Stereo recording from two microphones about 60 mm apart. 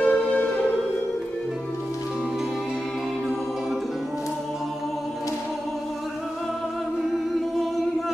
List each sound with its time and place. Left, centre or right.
0.0 s music: left